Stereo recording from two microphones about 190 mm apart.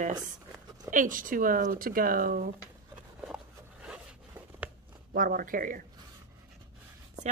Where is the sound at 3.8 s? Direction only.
5° right (ahead or behind).